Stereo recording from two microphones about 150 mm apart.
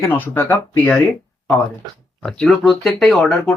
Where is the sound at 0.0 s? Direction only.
15° left (ahead or behind).